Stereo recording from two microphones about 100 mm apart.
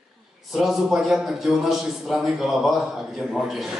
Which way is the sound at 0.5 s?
5° right (ahead or behind).